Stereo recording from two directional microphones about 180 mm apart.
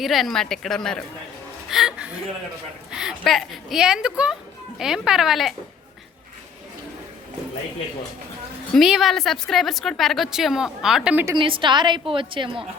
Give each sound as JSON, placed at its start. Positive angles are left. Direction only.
{"t": 0.0, "sound": "a woman's voice", "side_deg": 0}
{"t": 8.7, "sound": "a woman's voice", "side_deg": 0}
{"t": 11.3, "sound": "a woman's voice", "side_deg": -30}